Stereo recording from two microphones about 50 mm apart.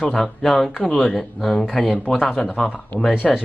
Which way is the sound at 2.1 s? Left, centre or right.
Left.